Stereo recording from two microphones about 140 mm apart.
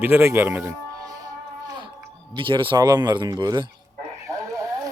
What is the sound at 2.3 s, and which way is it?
Speech, 35° right (ahead or behind).